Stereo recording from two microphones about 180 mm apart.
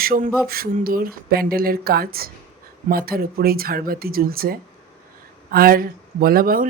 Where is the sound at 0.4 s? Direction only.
55° right (ahead or behind).